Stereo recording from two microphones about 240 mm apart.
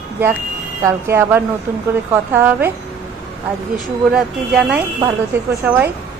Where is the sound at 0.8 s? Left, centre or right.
Centre.